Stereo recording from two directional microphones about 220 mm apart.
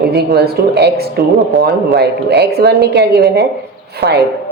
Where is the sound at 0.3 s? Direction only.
45° right (ahead or behind).